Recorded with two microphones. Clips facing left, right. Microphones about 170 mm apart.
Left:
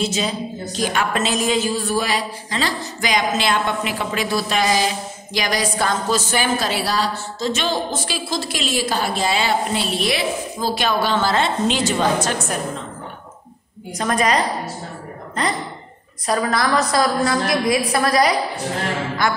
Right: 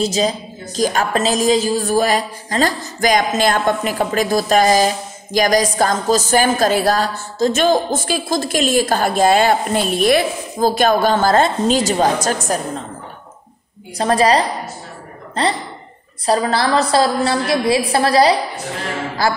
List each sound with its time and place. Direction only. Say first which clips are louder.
0.0 s a woman's voice: right 4 dB; 40° right (ahead or behind)
13.9 s a woman's voice: right 5 dB; 30° right (ahead or behind)